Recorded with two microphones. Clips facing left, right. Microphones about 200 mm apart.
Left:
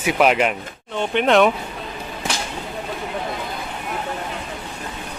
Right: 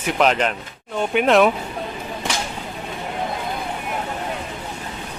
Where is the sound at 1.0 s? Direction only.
5° right (ahead or behind).